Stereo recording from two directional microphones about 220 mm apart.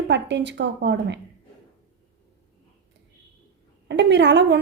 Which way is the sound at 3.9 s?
50° right (ahead or behind).